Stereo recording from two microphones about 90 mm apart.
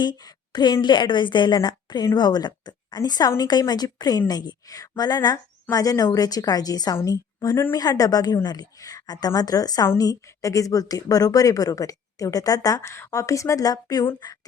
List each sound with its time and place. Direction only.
0.0 s a woman's voice: 50° left (ahead or behind)